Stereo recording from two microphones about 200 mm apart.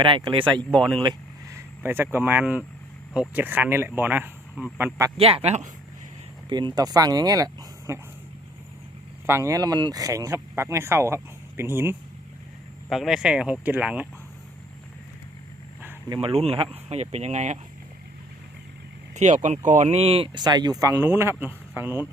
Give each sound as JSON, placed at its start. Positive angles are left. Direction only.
{"t": 0.0, "sound": "speech", "side_deg": -25}
{"t": 0.6, "sound": "speech", "side_deg": 0}
{"t": 1.0, "sound": "vehicle", "side_deg": -15}
{"t": 2.1, "sound": "speech", "side_deg": -10}
{"t": 5.1, "sound": "speech", "side_deg": -30}
{"t": 6.5, "sound": "speech", "side_deg": -20}
{"t": 9.2, "sound": "speech", "side_deg": -15}
{"t": 16.0, "sound": "speech", "side_deg": -25}
{"t": 19.1, "sound": "speech", "side_deg": -35}